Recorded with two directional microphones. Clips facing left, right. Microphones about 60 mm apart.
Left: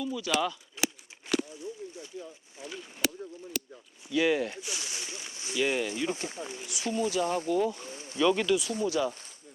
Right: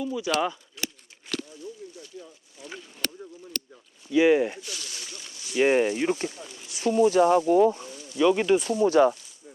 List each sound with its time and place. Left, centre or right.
0.0 s speech: right
1.3 s a sound: centre
2.6 s speech: left
3.0 s speech: centre
3.5 s a sound: centre
4.1 s speech: right
4.6 s a sound: centre
5.5 s speech: right
6.2 s speech: left
6.7 s speech: right
7.9 s a sound: left
8.2 s speech: centre
8.4 s speech: right